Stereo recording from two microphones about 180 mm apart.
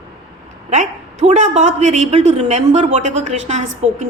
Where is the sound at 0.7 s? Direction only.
40° right (ahead or behind).